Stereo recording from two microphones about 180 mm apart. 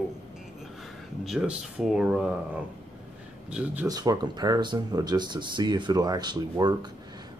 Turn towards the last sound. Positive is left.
turn(degrees=-25)  # may be behind; listen again after turning